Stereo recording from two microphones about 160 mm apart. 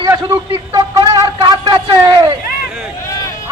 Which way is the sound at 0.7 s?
25° right (ahead or behind).